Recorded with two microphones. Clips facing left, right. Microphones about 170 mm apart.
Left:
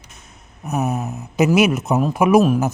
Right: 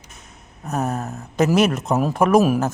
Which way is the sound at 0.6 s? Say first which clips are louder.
Left 2 dB; 5° left (ahead or behind).